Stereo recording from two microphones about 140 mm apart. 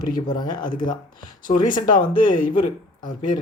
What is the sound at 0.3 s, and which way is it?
Speech, 30° left (ahead or behind).